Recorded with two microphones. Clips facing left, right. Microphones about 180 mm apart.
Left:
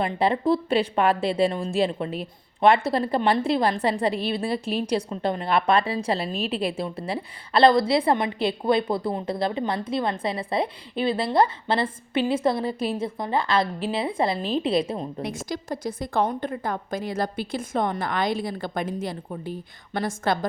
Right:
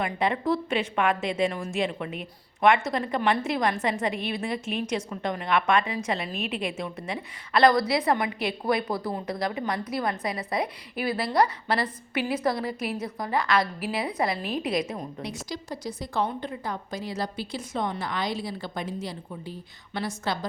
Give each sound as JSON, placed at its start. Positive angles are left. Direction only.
{"t": 0.0, "sound": "a woman's voice", "side_deg": 30}
{"t": 15.2, "sound": "a woman's voice", "side_deg": 50}